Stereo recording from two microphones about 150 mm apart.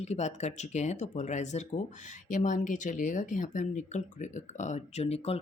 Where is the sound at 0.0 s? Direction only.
50° left (ahead or behind).